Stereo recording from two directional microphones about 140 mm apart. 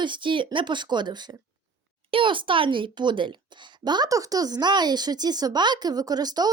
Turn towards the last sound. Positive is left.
turn(degrees=-30)  # may be behind; listen again after turning